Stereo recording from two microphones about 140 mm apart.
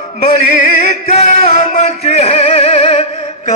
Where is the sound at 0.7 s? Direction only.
50° left (ahead or behind).